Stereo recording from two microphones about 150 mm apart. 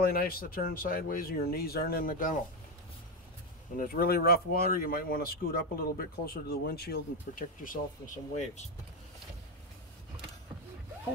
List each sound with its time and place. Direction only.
0.0 s speech: 85° left
3.7 s speech: 70° left (ahead or behind)